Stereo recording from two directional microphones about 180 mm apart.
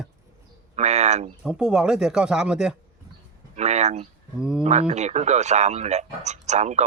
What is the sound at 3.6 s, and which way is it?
Speech, 40° right (ahead or behind).